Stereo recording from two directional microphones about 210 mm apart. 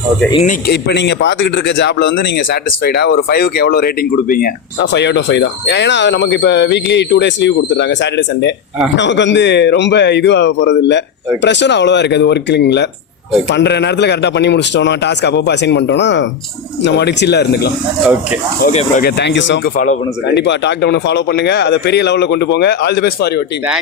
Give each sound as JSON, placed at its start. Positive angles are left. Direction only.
{"t": 0.7, "sound": "speech", "side_deg": 55}
{"t": 18.6, "sound": "speech", "side_deg": 35}
{"t": 19.0, "sound": "speech", "side_deg": 55}
{"t": 19.7, "sound": "speech", "side_deg": 35}
{"t": 20.2, "sound": "speech", "side_deg": 55}